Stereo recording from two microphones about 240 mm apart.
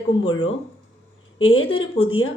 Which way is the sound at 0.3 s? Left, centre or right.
Left.